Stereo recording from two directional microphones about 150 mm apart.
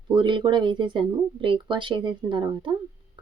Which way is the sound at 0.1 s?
30° right (ahead or behind).